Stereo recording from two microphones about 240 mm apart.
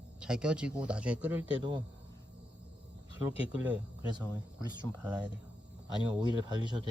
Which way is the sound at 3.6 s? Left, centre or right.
Centre.